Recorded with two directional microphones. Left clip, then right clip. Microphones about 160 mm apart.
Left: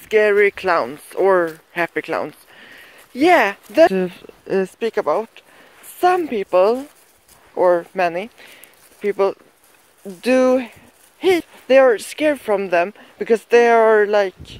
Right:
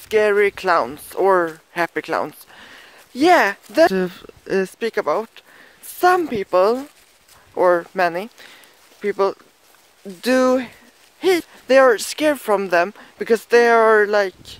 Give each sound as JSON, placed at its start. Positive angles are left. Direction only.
{"t": 0.0, "sound": "speech", "side_deg": -10}
{"t": 3.9, "sound": "speech", "side_deg": -20}
{"t": 11.6, "sound": "speech", "side_deg": -20}